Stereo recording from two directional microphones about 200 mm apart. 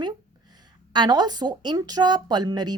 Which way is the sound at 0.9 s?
20° right (ahead or behind).